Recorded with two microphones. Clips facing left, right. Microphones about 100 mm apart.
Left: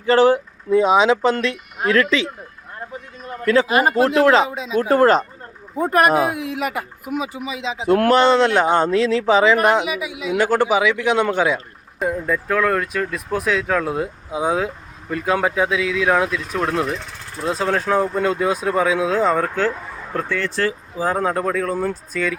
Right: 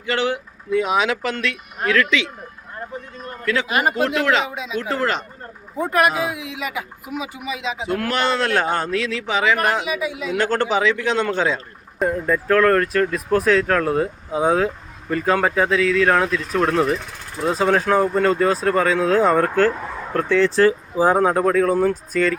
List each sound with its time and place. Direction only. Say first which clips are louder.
0.0 s speech: left 8 dB; 35° left (ahead or behind)
3.4 s speech: left 4 dB; 35° left (ahead or behind)
7.3 s speech: even; 25° left (ahead or behind)
7.9 s speech: left 10 dB; 50° left (ahead or behind)
8.1 s speech: left 4 dB; 30° left (ahead or behind); by 19.5 s centre (ahead or behind)
20.1 s speech: right 2 dB; 15° left (ahead or behind)
21.2 s speech: right 4 dB; 5° right (ahead or behind)